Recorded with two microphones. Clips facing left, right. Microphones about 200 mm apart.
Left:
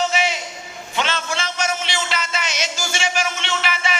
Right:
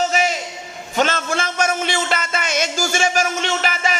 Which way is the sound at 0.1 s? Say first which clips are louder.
Right 2 dB; 45° right (ahead or behind).